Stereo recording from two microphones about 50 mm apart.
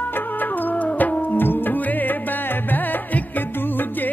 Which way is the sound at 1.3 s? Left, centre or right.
Left.